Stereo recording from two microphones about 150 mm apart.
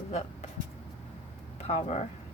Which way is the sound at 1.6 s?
45° left (ahead or behind).